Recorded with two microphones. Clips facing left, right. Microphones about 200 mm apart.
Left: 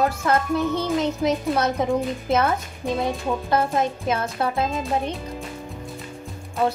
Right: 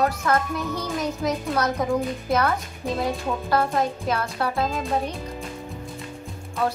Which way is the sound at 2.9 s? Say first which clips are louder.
Left 1 dB; centre (ahead or behind).